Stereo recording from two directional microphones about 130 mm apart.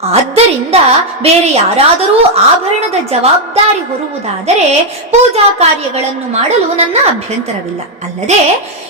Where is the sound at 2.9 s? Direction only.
55° right (ahead or behind).